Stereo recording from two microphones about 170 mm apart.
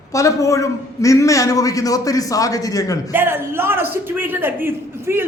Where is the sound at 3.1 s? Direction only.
15° right (ahead or behind).